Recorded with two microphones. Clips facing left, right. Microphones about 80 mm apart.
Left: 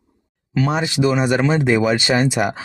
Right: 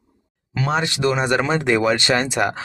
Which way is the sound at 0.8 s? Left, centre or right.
Centre.